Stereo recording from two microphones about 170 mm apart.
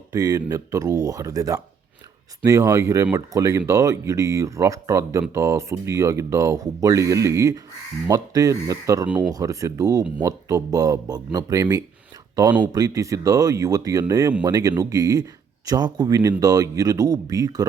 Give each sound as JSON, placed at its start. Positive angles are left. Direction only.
{"t": 0.1, "sound": "speech", "side_deg": -20}